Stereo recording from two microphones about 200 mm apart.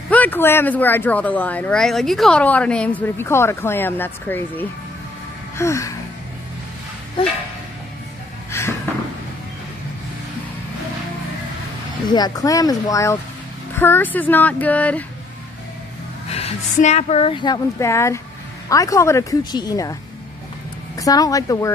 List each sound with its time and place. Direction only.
0.1 s speech: 10° left (ahead or behind)
8.5 s a sound: 15° left (ahead or behind)
12.1 s speech: 20° left (ahead or behind)
16.3 s a woman's voice: 30° left (ahead or behind); by 21.7 s 15° left (ahead or behind)